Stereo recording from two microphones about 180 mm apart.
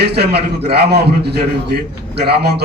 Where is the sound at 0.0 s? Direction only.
65° right (ahead or behind).